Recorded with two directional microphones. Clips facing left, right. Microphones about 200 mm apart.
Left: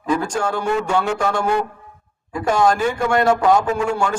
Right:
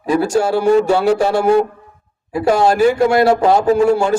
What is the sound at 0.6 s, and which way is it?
A man's voice, 35° right (ahead or behind).